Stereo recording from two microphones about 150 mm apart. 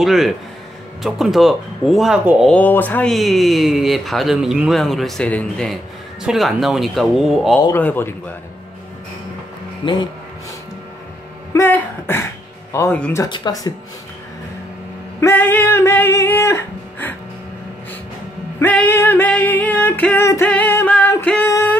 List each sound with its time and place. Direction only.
0.0 s speech: centre (ahead or behind)
2.5 s speech: 10° left (ahead or behind)
7.7 s music: 15° left (ahead or behind)
11.5 s music: 15° left (ahead or behind)
13.2 s speech: 25° left (ahead or behind)
15.1 s music: 15° left (ahead or behind)
18.6 s music: 10° left (ahead or behind)